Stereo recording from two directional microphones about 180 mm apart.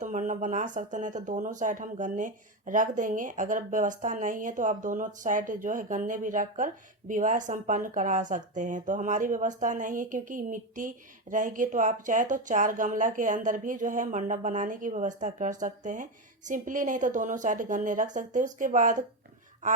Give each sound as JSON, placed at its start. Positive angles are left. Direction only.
{"t": 0.0, "sound": "speech", "side_deg": -45}